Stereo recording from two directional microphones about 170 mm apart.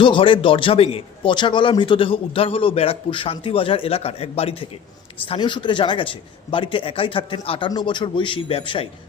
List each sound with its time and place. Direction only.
0.0 s a man's voice: 30° left (ahead or behind)